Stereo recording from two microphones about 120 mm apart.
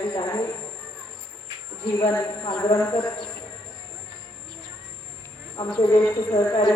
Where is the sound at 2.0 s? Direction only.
25° left (ahead or behind).